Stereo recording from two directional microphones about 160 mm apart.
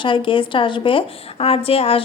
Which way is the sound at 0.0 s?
30° left (ahead or behind).